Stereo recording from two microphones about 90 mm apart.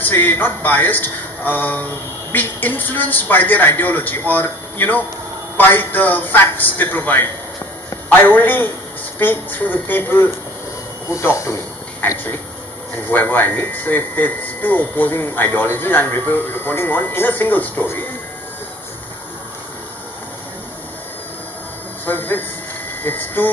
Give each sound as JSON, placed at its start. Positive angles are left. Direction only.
{"t": 0.0, "sound": "a man's voice", "side_deg": 25}
{"t": 11.1, "sound": "speech", "side_deg": 35}
{"t": 12.9, "sound": "a man's voice", "side_deg": 20}
{"t": 22.0, "sound": "a sound", "side_deg": 20}
{"t": 23.0, "sound": "a man's voice", "side_deg": 20}